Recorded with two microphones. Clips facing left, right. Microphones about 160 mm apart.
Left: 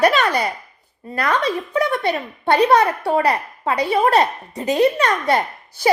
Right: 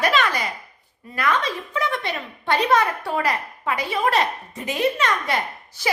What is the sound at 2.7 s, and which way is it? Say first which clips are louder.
Speech: left 5 dB; 35° left (ahead or behind).